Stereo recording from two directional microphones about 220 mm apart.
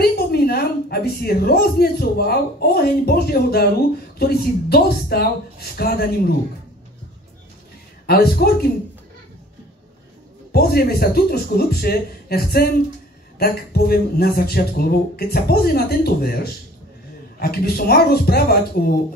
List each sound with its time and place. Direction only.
0.0 s speech: 45° left (ahead or behind)
8.1 s speech: 45° left (ahead or behind)
10.5 s speech: 45° left (ahead or behind)
17.4 s speech: 45° left (ahead or behind)